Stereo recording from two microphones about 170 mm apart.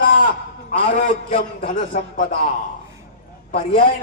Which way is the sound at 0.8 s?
50° left (ahead or behind).